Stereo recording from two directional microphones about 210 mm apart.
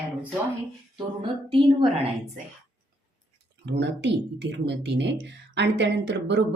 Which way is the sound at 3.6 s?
55° right (ahead or behind).